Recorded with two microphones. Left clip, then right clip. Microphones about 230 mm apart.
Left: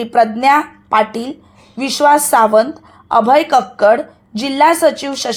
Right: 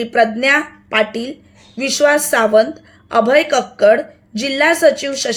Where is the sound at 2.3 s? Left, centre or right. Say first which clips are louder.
Left 2 dB; left.